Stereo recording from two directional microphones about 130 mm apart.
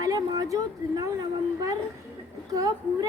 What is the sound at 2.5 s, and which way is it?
Speech, 25° right (ahead or behind).